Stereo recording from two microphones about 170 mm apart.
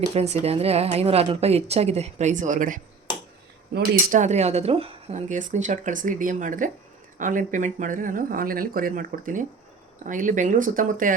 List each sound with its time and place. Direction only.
0.1 s a woman's voice: 40° right (ahead or behind)
3.7 s speech: 70° right (ahead or behind)
4.1 s a woman's voice: 45° right (ahead or behind)
5.3 s speech: 45° right (ahead or behind)